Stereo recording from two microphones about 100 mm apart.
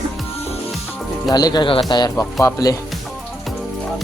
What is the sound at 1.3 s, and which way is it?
Speech, 40° left (ahead or behind).